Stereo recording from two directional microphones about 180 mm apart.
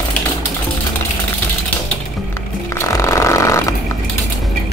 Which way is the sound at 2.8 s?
15° left (ahead or behind).